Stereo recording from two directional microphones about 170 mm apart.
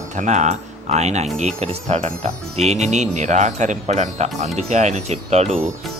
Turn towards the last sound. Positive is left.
turn(degrees=-40)  # may be behind; listen again after turning